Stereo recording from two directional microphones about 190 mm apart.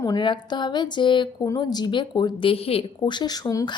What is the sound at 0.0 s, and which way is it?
Speech, 20° left (ahead or behind).